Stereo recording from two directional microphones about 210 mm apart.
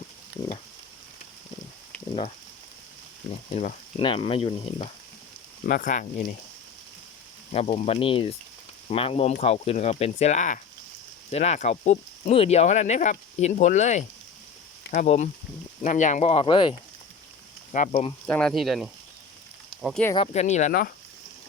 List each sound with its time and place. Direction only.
3.5 s speech: 40° left (ahead or behind)
3.9 s speech: 25° left (ahead or behind)
5.6 s speech: 40° left (ahead or behind)
7.5 s speech: 30° left (ahead or behind)
18.3 s speech: 5° left (ahead or behind)
20.1 s speech: 30° left (ahead or behind)